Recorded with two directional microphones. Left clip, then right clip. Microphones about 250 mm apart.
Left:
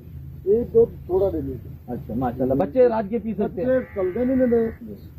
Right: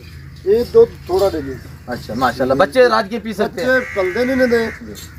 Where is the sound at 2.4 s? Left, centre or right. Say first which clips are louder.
Right 5 dB; centre.